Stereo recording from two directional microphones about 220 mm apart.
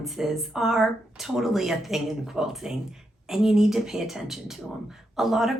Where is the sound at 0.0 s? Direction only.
Centre (ahead or behind).